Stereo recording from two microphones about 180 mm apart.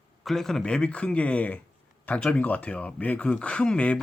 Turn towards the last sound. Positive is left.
turn(degrees=5)  # may be behind; listen again after turning